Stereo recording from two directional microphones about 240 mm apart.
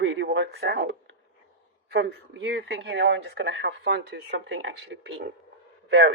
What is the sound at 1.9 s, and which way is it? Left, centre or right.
Speech, right.